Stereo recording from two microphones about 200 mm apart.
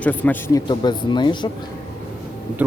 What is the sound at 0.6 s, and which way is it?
Speech, 20° left (ahead or behind).